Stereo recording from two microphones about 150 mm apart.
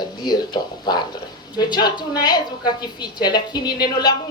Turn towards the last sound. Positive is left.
turn(degrees=25)  # may be behind; listen again after turning